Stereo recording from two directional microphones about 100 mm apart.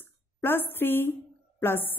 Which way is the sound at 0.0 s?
20° left (ahead or behind).